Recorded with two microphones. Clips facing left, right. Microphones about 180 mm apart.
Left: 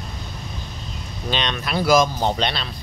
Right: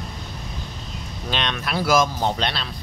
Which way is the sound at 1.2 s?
Centre (ahead or behind).